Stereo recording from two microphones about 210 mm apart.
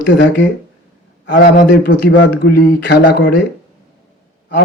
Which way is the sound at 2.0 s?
55° left (ahead or behind).